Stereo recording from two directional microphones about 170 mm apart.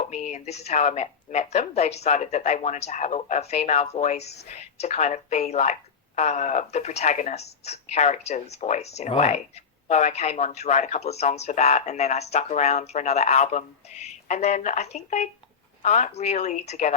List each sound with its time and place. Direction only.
0.1 s speech: 40° left (ahead or behind)